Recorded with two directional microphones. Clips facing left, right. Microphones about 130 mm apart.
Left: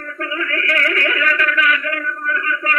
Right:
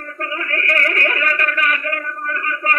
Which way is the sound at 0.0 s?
35° right (ahead or behind).